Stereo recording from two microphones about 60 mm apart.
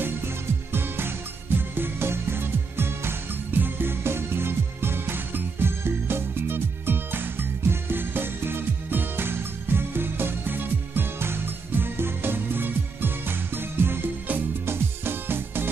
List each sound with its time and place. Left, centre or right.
0.0 s music: right